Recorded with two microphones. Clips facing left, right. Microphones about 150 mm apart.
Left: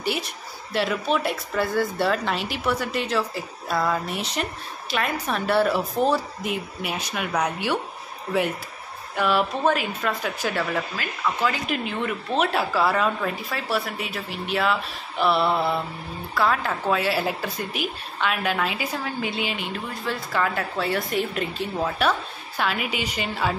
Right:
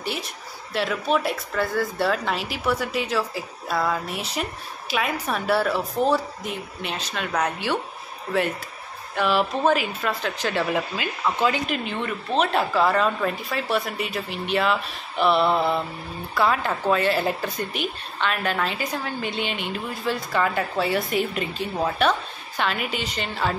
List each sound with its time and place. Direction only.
0.0 s speech: centre (ahead or behind)
9.2 s speech: 10° right (ahead or behind)
10.5 s speech: 20° right (ahead or behind)
11.6 s a woman's voice: 5° left (ahead or behind)